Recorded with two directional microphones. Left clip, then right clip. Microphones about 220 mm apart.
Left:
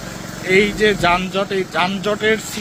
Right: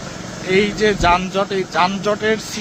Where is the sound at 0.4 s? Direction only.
Centre (ahead or behind).